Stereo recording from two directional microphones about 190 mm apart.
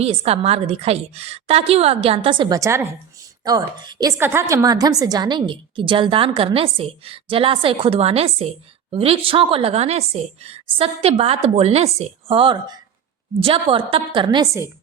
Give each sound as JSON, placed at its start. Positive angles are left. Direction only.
{"t": 0.0, "sound": "a woman's voice", "side_deg": -30}